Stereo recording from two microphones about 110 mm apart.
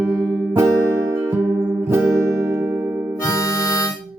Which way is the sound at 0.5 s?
25° right (ahead or behind).